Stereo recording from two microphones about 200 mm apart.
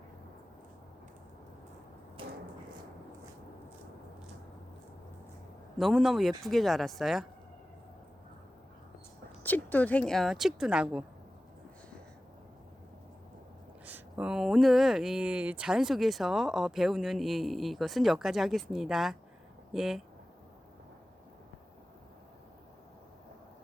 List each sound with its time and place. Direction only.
2.2 s a sound: 25° right (ahead or behind)
5.7 s speech: centre (ahead or behind)
9.4 s speech: 10° left (ahead or behind)
13.8 s speech: 10° right (ahead or behind)